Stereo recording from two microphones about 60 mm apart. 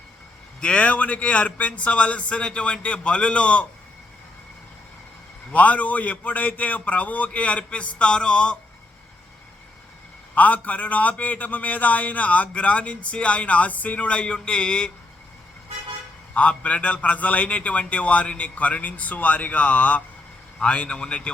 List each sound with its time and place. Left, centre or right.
0.6 s a man's voice: centre
5.5 s a man's voice: left
10.3 s a man's voice: left
16.3 s a man's voice: left